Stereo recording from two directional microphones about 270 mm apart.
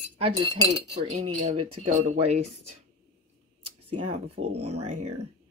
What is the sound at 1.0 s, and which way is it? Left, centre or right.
Speech, right.